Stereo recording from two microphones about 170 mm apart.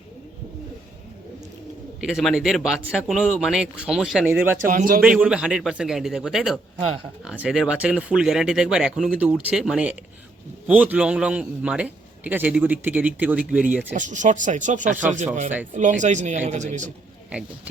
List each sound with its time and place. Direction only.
2.0 s speech: 5° right (ahead or behind)
4.3 s a man's voice: 15° right (ahead or behind)
4.7 s speech: 55° right (ahead or behind)
5.0 s a man's voice: 5° right (ahead or behind)
13.9 s speech: 45° right (ahead or behind)